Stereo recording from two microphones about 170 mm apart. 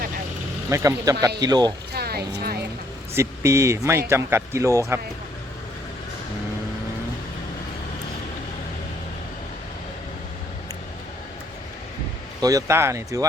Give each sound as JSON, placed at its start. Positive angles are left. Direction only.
{"t": 0.7, "sound": "speech", "side_deg": -20}
{"t": 1.9, "sound": "a sound", "side_deg": -65}
{"t": 3.2, "sound": "speech", "side_deg": -15}
{"t": 12.4, "sound": "speech", "side_deg": -20}